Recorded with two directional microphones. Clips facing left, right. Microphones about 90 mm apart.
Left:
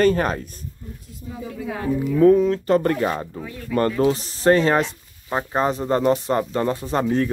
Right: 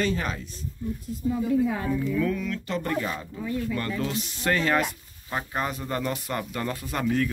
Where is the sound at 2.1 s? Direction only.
35° left (ahead or behind).